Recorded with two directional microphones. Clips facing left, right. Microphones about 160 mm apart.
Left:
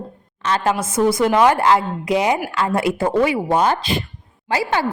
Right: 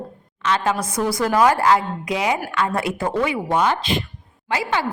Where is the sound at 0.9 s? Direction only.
25° left (ahead or behind).